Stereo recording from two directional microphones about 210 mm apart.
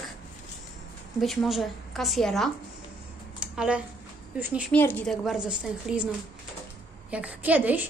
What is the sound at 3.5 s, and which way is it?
A woman's voice, 5° right (ahead or behind).